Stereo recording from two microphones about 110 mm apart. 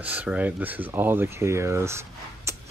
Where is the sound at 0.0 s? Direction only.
10° right (ahead or behind).